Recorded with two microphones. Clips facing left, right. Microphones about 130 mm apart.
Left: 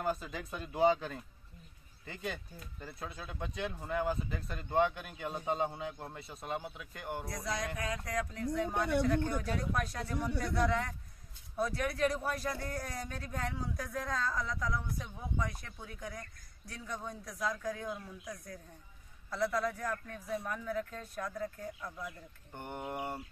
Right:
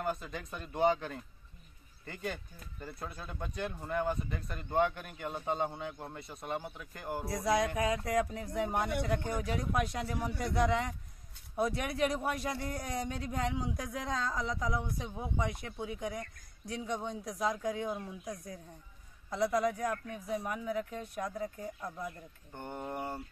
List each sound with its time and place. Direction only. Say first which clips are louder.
0.0 s speech: left 1 dB; centre (ahead or behind)
2.8 s speech: right 1 dB; centre (ahead or behind)
7.2 s speech: right 11 dB; 30° right (ahead or behind)
22.8 s speech: even; 10° left (ahead or behind)